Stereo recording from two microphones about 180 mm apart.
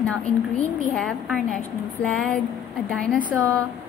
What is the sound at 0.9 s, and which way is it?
A woman's voice, centre (ahead or behind).